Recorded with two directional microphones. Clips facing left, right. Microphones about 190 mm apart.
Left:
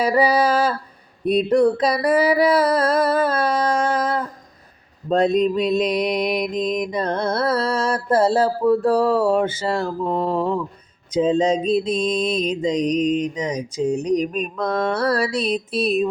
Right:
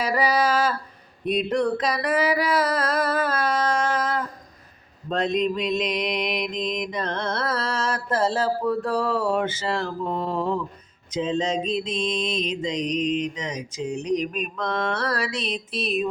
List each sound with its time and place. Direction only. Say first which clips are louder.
0.0 s mantra: left 5 dB; 30° left (ahead or behind)